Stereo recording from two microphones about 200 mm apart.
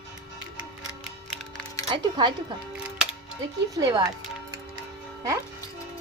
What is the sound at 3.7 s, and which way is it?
Speech, 20° right (ahead or behind).